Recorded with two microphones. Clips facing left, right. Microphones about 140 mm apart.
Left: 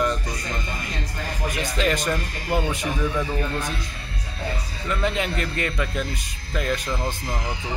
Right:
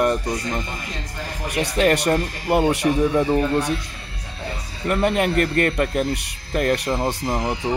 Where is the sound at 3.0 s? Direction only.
35° right (ahead or behind).